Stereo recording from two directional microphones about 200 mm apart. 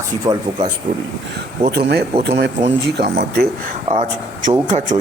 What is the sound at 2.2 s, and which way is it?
Speech, 55° right (ahead or behind).